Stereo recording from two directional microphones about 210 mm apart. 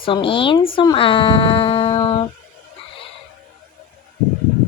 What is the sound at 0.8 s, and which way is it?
Female singing, 25° left (ahead or behind).